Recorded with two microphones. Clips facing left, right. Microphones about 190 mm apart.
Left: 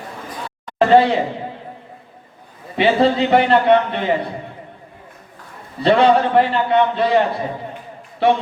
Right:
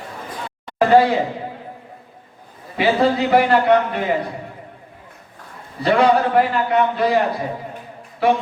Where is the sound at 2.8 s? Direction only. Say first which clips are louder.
Left 2 dB; 25° left (ahead or behind).